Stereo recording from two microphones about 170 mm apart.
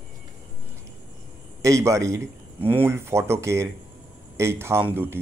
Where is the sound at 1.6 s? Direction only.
20° right (ahead or behind).